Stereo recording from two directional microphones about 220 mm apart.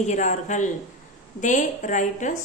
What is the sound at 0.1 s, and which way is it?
Speech, 35° left (ahead or behind).